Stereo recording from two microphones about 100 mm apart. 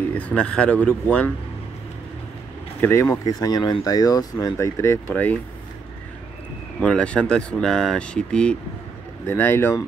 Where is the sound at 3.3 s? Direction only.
40° left (ahead or behind).